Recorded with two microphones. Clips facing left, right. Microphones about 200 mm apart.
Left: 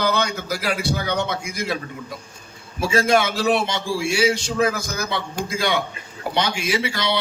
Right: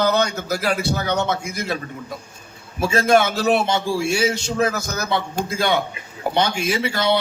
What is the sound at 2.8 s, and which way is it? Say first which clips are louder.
A man's voice: right 2 dB; 40° right (ahead or behind).